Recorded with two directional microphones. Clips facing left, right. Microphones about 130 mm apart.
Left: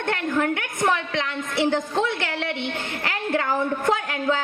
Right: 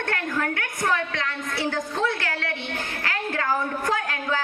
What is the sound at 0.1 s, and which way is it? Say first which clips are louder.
A woman's voice: left 6 dB; 20° left (ahead or behind).